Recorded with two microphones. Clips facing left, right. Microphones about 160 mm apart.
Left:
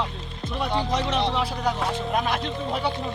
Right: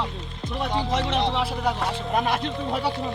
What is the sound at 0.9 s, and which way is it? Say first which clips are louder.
Speech: even; 25° right (ahead or behind).